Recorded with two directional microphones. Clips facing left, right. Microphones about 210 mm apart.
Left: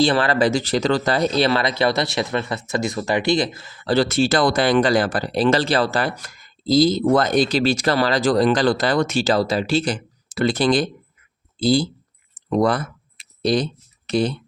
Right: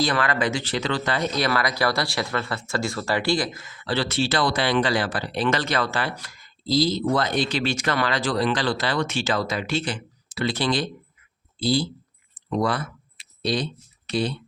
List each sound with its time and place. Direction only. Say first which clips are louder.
0.0 s speech: left 6 dB; 30° left (ahead or behind); by 10.9 s 45° left (ahead or behind)
12.3 s clicking: left 6 dB; 45° left (ahead or behind)
14.1 s speech: left 5 dB; 45° left (ahead or behind)